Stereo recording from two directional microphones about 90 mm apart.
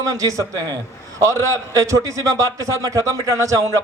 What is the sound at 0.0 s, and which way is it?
A man's voice, 40° right (ahead or behind).